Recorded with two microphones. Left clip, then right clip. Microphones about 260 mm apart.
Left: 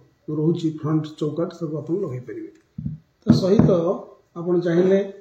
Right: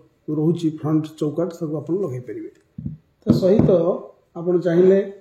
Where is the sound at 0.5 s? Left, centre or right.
Right.